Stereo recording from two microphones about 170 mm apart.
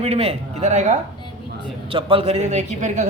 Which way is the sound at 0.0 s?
35° right (ahead or behind).